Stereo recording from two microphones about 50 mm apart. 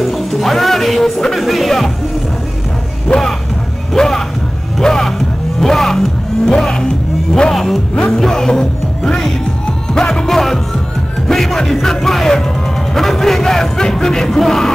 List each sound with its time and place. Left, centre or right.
0.0 s speech: centre
3.1 s speech: left
3.9 s a sound: centre
4.7 s music: centre
12.9 s speech: centre